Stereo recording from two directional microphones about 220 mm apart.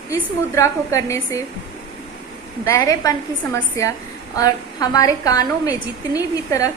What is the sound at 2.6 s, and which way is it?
A woman's voice, 15° left (ahead or behind).